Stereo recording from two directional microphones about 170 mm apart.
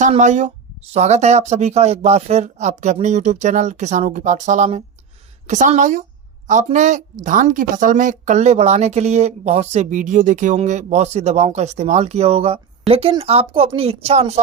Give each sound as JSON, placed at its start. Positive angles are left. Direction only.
{"t": 0.0, "sound": "a woman's voice", "side_deg": -45}